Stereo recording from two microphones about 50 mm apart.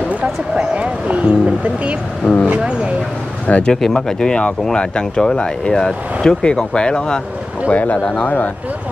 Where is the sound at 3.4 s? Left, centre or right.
Left.